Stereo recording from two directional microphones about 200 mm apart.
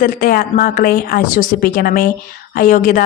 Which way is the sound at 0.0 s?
45° left (ahead or behind).